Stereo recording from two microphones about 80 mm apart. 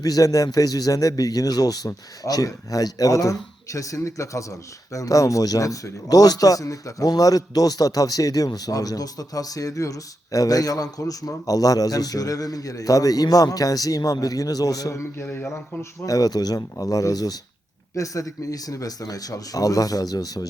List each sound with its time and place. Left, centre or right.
0.0 s speech: left
15.2 s speech: left